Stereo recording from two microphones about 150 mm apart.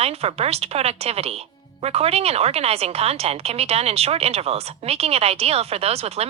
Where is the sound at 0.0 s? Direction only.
45° right (ahead or behind).